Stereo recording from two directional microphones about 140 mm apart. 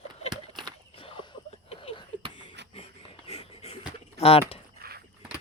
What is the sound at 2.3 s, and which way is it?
Beatboxing, 40° left (ahead or behind).